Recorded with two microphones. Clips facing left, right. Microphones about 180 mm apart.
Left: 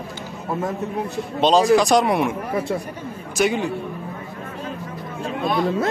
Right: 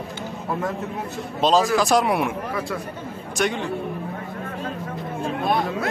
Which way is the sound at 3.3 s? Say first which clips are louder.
Left 4 dB; 5° left (ahead or behind).